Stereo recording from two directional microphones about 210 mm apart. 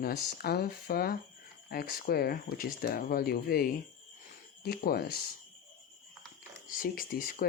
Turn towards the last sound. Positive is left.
turn(degrees=40)  # may be behind; listen again after turning